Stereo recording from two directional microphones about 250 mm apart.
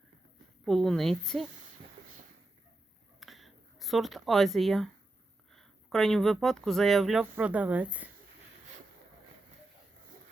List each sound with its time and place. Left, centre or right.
0.6 s speech: centre
3.2 s a sound: centre
5.5 s speech: centre